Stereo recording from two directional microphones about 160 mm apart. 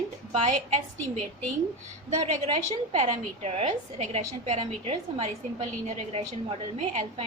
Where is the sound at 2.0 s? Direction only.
50° right (ahead or behind).